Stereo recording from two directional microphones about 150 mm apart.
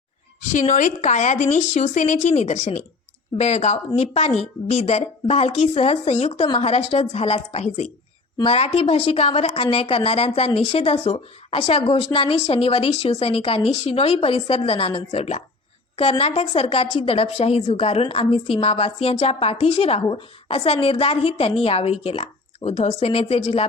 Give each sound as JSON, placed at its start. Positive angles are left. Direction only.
{"t": 0.5, "sound": "a woman's voice", "side_deg": 55}